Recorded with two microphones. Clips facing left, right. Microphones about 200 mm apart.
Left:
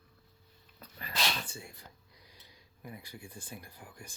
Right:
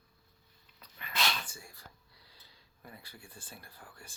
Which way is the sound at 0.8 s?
35° left (ahead or behind).